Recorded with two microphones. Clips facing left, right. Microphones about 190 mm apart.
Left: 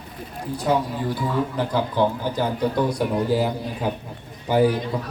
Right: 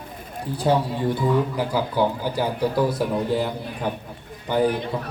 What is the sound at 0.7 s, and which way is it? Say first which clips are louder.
Speech: right 1 dB; 30° right (ahead or behind).